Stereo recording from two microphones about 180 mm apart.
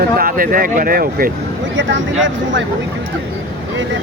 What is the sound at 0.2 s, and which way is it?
Speech, 50° right (ahead or behind).